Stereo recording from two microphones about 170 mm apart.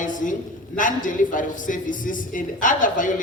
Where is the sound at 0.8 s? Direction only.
50° left (ahead or behind).